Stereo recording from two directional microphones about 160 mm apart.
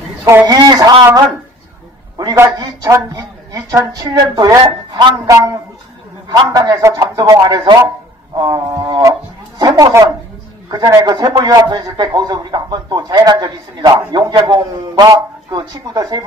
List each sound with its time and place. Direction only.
0.2 s a man's voice: 15° right (ahead or behind)